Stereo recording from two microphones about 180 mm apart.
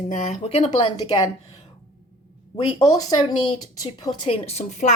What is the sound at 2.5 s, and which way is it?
Speech, 20° left (ahead or behind).